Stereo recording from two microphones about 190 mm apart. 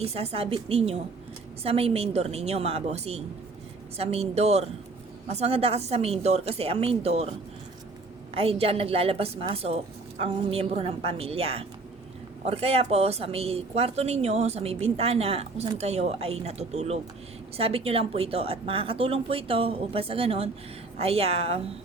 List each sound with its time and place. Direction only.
0.0 s speech: 30° right (ahead or behind)
8.4 s a woman's voice: 30° right (ahead or behind)